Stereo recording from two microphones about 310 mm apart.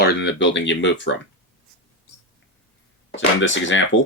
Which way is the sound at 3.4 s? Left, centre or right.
Left.